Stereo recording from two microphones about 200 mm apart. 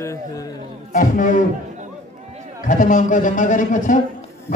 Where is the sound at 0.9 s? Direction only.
40° left (ahead or behind).